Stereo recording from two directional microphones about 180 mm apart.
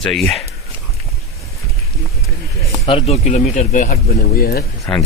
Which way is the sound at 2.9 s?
35° left (ahead or behind).